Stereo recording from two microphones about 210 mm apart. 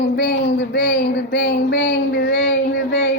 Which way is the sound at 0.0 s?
55° left (ahead or behind).